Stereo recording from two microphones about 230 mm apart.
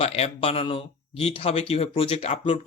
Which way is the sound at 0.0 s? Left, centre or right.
Left.